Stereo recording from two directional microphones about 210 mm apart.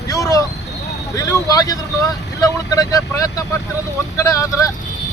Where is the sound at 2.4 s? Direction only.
15° left (ahead or behind).